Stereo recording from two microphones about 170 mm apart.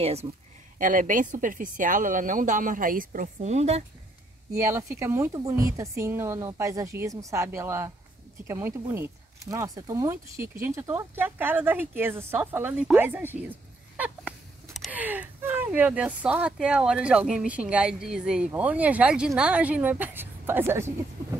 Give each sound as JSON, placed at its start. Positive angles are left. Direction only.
{"t": 0.0, "sound": "speech", "side_deg": -40}
{"t": 0.7, "sound": "a woman's voice", "side_deg": -50}
{"t": 4.6, "sound": "a woman's voice", "side_deg": -15}